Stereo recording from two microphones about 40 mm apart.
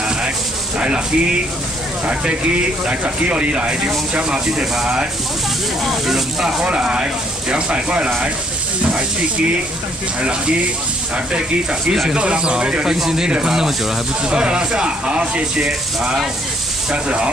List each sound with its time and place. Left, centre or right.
0.7 s speech: right
5.9 s speech: centre
6.6 s speech: right
12.1 s speech: right